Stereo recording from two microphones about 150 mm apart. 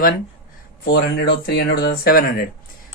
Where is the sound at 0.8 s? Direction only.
90° left.